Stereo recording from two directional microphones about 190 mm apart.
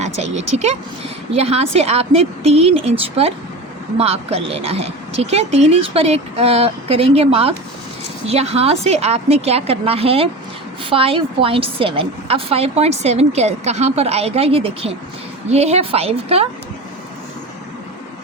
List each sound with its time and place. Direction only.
0.0 s a woman's voice: 35° right (ahead or behind)